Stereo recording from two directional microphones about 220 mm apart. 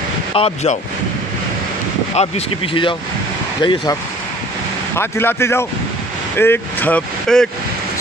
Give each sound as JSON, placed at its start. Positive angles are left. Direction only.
{"t": 0.3, "sound": "speech", "side_deg": 25}
{"t": 2.1, "sound": "speech", "side_deg": 25}
{"t": 4.9, "sound": "speech", "side_deg": 10}